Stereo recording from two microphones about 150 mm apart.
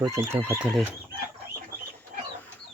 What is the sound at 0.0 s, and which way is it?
Speech, 20° right (ahead or behind).